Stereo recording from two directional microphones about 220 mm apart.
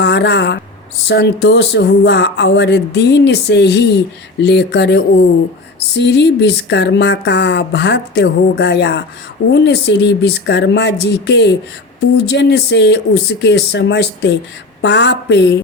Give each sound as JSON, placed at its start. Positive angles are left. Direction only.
{"t": 0.0, "sound": "speech", "side_deg": 50}